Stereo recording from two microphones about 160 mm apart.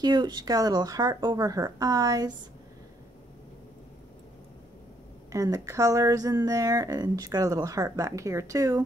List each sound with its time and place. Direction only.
0.0 s speech: 30° right (ahead or behind)
5.3 s speech: 20° right (ahead or behind)